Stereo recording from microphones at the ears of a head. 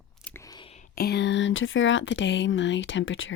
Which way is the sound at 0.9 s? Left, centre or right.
Left.